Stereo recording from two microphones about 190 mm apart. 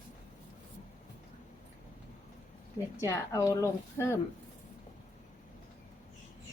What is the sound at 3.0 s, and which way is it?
A woman's voice, 15° left (ahead or behind).